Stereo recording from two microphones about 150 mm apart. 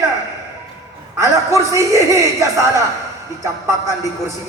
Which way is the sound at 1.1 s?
20° right (ahead or behind).